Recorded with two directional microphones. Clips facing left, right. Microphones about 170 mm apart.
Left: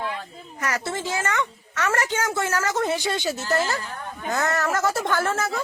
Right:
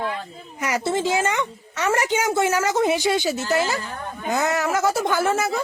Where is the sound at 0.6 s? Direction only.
15° right (ahead or behind).